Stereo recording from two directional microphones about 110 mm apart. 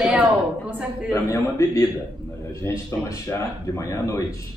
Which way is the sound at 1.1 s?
25° left (ahead or behind).